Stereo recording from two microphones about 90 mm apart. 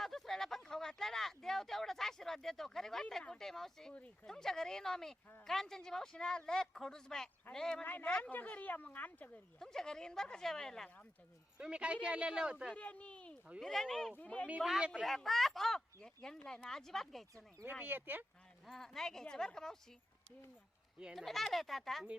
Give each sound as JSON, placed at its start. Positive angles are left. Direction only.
{"t": 0.0, "sound": "a sound", "side_deg": 5}
{"t": 3.9, "sound": "speech", "side_deg": 15}
{"t": 4.3, "sound": "speech", "side_deg": 5}
{"t": 9.6, "sound": "speech", "side_deg": 5}
{"t": 11.5, "sound": "speech", "side_deg": -10}
{"t": 12.7, "sound": "speech", "side_deg": 15}
{"t": 13.6, "sound": "speech", "side_deg": 5}
{"t": 14.6, "sound": "speech", "side_deg": 0}
{"t": 17.7, "sound": "speech", "side_deg": -20}
{"t": 18.6, "sound": "speech", "side_deg": 5}
{"t": 21.0, "sound": "speech", "side_deg": 0}